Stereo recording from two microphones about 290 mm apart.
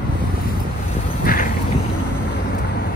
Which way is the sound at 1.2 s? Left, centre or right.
Left.